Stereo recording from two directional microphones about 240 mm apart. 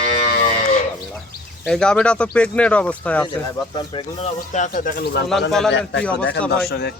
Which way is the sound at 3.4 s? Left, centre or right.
Centre.